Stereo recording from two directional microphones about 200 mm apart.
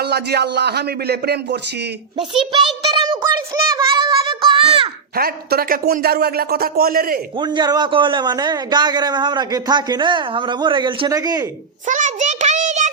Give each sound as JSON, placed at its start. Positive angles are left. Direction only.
{"t": 0.0, "sound": "speech", "side_deg": -55}
{"t": 2.4, "sound": "child singing", "side_deg": -25}
{"t": 5.1, "sound": "speech", "side_deg": -50}
{"t": 7.3, "sound": "a man's voice", "side_deg": -20}
{"t": 11.9, "sound": "a sound", "side_deg": -40}